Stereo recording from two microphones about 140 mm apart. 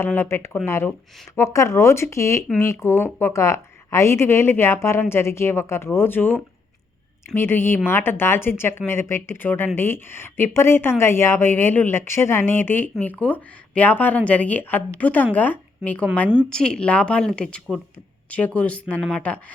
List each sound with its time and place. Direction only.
0.0 s speech: 15° left (ahead or behind)